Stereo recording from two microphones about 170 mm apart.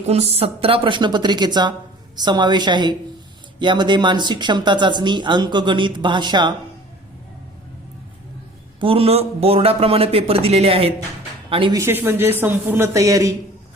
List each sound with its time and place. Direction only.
0.1 s speech: 35° right (ahead or behind)
8.8 s a man's voice: 35° right (ahead or behind)
11.8 s a man's voice: 15° right (ahead or behind)